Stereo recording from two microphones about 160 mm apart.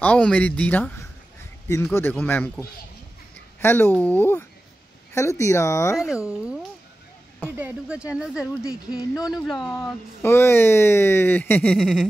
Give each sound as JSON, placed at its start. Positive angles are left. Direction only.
{"t": 0.0, "sound": "speech", "side_deg": 10}
{"t": 2.0, "sound": "speech", "side_deg": 10}
{"t": 3.6, "sound": "speech", "side_deg": 15}
{"t": 5.9, "sound": "speech", "side_deg": -5}
{"t": 10.2, "sound": "speech", "side_deg": 15}